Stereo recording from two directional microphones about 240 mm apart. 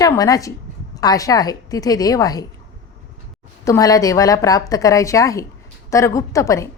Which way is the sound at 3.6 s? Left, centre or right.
Centre.